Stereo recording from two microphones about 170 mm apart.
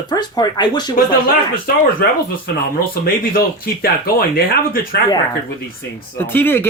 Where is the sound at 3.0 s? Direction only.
60° left (ahead or behind).